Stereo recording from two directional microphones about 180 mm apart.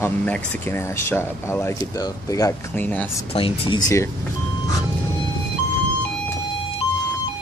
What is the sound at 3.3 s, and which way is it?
Speech, 30° left (ahead or behind).